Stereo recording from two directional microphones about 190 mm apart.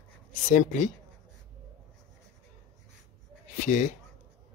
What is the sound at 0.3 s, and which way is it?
Speech, 40° left (ahead or behind).